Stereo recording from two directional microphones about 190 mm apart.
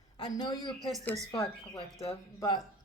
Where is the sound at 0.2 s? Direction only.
20° left (ahead or behind).